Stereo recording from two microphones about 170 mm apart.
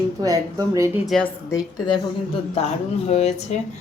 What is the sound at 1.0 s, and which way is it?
Speech, centre (ahead or behind).